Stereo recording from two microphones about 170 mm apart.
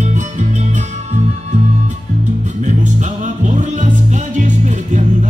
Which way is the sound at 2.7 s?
45° right (ahead or behind).